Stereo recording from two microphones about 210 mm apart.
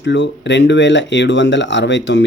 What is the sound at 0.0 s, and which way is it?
Speech, 60° left (ahead or behind).